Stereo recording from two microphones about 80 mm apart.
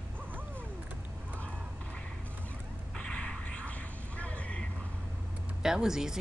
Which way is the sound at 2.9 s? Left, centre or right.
Centre.